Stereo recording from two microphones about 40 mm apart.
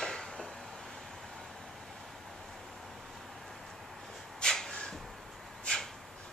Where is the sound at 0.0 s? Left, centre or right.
Centre.